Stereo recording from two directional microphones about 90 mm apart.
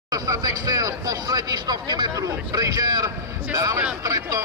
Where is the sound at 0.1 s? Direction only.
40° right (ahead or behind).